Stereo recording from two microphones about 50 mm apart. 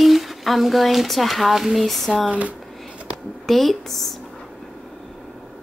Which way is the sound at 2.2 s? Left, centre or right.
Right.